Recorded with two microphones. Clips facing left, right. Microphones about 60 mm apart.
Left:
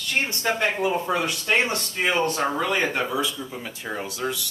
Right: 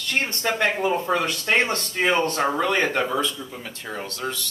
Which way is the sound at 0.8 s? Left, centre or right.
Centre.